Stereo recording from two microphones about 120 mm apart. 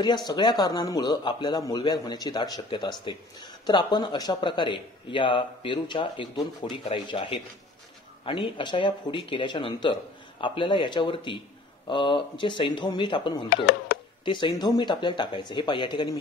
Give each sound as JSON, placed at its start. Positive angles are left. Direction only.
{"t": 0.3, "sound": "a man's voice", "side_deg": 35}